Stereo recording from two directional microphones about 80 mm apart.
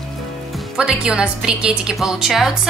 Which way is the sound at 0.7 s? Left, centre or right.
Centre.